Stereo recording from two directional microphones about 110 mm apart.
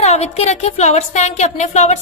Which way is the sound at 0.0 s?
75° left (ahead or behind).